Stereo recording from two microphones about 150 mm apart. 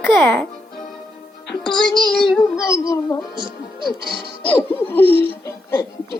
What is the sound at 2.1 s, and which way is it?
Speech, centre (ahead or behind).